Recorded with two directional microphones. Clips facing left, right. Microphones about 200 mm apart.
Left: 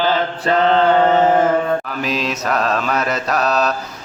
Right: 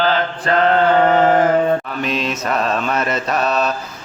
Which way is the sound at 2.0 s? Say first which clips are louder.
Even; centre (ahead or behind).